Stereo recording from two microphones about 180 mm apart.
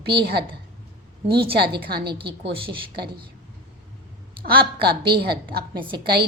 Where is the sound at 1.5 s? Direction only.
65° right (ahead or behind).